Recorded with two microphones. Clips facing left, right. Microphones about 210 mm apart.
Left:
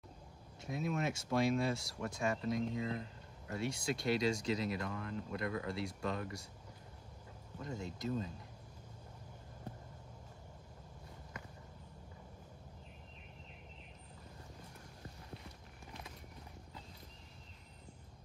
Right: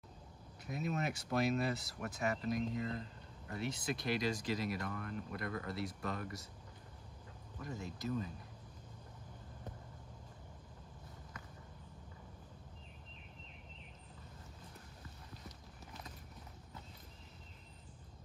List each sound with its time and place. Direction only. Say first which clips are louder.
0.7 s speech: left 2 dB; 25° left (ahead or behind)
7.5 s speech: left 2 dB; 25° left (ahead or behind)